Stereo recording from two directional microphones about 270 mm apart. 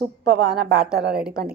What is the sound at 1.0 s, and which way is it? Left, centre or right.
Speech, centre.